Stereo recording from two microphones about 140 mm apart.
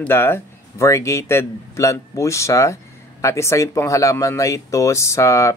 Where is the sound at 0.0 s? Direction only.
15° left (ahead or behind).